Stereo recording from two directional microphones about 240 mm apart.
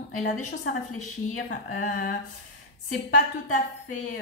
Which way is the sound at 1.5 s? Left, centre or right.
Left.